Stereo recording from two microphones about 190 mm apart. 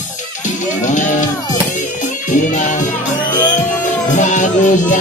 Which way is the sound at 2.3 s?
40° left (ahead or behind).